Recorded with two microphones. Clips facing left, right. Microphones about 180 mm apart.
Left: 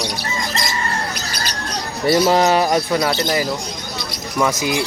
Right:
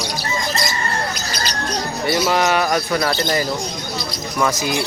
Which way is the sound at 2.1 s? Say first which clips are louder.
Left 4 dB; 35° left (ahead or behind).